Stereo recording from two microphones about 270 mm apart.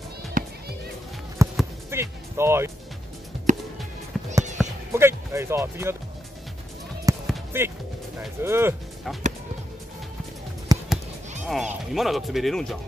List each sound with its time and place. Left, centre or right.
0.4 s music: right
1.6 s music: centre
3.5 s music: right
4.1 s music: centre
7.2 s basketball bounce: centre
8.2 s speech: centre
10.7 s a sound: centre
11.4 s speech: centre